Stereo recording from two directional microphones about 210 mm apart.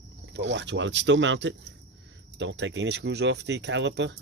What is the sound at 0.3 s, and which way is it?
Speech, 55° right (ahead or behind).